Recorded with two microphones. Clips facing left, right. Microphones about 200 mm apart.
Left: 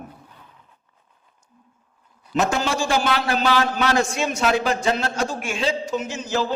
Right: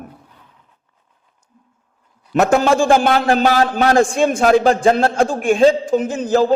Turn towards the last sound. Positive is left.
turn(degrees=-55)  # may be behind; listen again after turning